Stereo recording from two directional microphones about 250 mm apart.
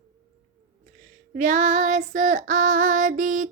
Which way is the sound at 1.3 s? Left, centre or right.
Right.